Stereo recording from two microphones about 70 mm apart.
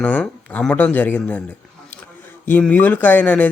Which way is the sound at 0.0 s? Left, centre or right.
Centre.